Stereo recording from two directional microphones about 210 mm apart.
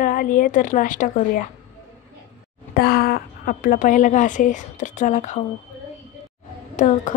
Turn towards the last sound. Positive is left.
turn(degrees=40)  # may be behind; listen again after turning